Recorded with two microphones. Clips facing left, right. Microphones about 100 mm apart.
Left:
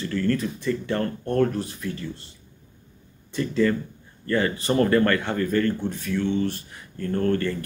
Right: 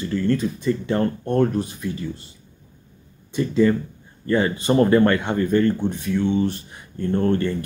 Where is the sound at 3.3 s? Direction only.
20° right (ahead or behind).